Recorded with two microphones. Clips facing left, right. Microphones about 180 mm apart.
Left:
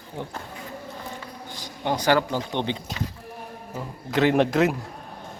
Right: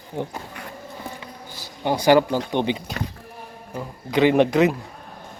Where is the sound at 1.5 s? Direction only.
10° right (ahead or behind).